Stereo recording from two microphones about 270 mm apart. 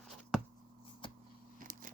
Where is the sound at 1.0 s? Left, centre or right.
Centre.